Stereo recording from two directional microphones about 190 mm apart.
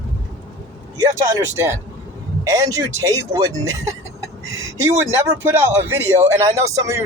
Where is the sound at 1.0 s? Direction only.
15° right (ahead or behind).